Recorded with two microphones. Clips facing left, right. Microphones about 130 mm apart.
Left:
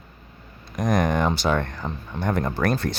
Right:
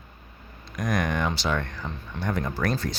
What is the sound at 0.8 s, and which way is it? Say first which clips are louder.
Speech: left 5 dB; 40° left (ahead or behind).